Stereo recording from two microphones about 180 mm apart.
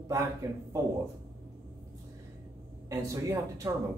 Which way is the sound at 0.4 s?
20° right (ahead or behind).